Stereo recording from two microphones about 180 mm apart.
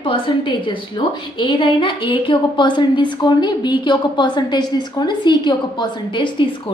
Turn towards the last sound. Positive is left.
turn(degrees=25)  # may be behind; listen again after turning